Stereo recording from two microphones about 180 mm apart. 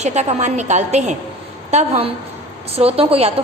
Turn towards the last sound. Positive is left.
turn(degrees=-35)  # may be behind; listen again after turning